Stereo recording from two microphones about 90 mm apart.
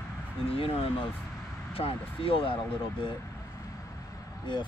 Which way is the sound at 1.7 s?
90° left.